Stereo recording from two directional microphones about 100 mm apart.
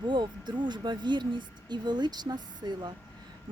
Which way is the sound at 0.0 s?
50° right (ahead or behind).